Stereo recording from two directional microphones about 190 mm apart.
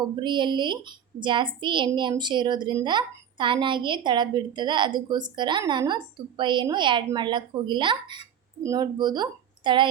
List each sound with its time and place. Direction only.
0.0 s a woman's voice: 25° right (ahead or behind)